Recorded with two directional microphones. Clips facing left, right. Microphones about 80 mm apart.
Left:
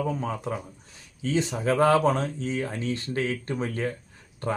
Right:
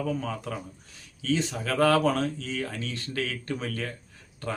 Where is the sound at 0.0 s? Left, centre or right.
Left.